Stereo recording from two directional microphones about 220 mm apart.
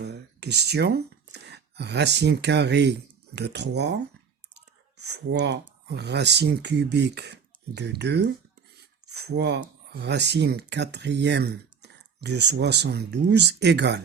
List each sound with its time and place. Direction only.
0.0 s speech: 50° right (ahead or behind)
4.5 s chewing: 50° right (ahead or behind)
5.9 s speech: 50° right (ahead or behind)